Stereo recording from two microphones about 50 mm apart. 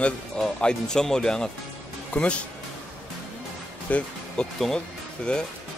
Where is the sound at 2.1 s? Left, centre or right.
Left.